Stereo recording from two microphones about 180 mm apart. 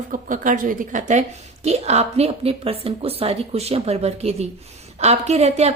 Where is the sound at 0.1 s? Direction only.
45° right (ahead or behind).